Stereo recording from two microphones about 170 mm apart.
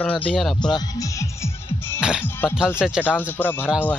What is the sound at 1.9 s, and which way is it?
Speech, 5° right (ahead or behind).